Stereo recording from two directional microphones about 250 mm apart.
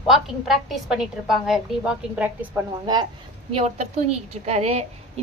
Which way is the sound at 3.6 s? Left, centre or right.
Right.